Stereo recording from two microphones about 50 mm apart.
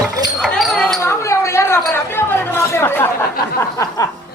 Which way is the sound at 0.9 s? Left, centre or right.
Left.